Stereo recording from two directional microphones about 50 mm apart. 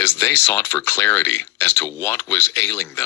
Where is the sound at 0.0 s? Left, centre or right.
Left.